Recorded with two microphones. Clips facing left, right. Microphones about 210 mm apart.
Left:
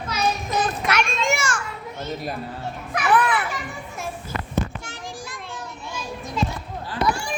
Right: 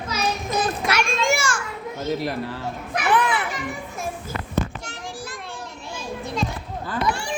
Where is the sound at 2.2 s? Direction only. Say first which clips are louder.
Right 4 dB; 80° right.